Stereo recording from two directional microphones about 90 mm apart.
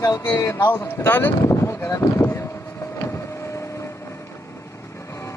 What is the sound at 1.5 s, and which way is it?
Speech, 35° left (ahead or behind).